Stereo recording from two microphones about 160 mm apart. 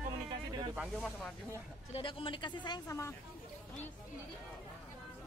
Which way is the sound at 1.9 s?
35° left (ahead or behind).